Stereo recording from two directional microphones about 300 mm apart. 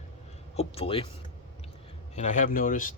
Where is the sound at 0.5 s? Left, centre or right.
Centre.